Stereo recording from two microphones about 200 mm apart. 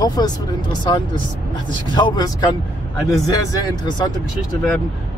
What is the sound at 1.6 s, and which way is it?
Speech, 25° left (ahead or behind).